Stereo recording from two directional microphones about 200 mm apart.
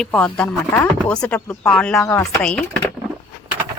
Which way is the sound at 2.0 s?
15° left (ahead or behind).